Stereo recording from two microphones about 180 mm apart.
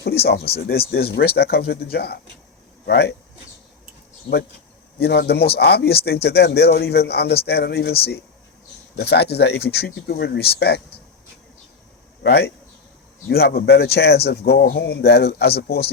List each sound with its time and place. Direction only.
0.0 s a man's voice: 60° left (ahead or behind)
4.9 s a man's voice: 65° left (ahead or behind)
9.0 s a man's voice: 65° left (ahead or behind)
12.2 s a man's voice: 65° left (ahead or behind)